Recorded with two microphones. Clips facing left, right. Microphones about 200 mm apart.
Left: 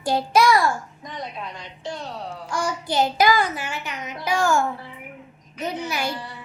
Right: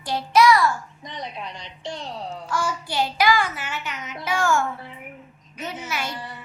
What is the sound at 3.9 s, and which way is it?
Speech, 35° left (ahead or behind).